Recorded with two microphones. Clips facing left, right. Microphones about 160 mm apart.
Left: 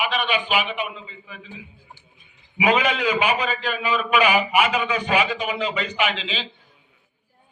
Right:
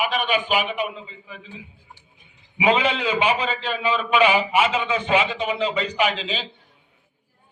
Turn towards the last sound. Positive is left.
turn(degrees=-40)  # may be behind; listen again after turning